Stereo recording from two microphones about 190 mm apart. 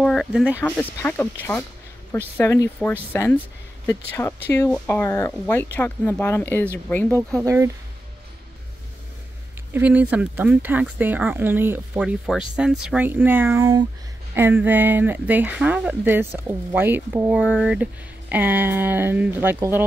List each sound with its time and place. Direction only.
0.0 s speech: centre (ahead or behind)
0.6 s speech: 10° left (ahead or behind)
2.3 s speech: 10° left (ahead or behind)
7.4 s speech: 15° right (ahead or behind)
9.8 s speech: 10° right (ahead or behind)